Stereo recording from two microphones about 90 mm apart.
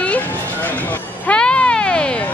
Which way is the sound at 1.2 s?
10° left (ahead or behind).